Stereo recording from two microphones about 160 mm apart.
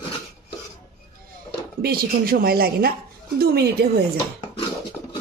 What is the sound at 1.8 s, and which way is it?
Speech, 70° right (ahead or behind).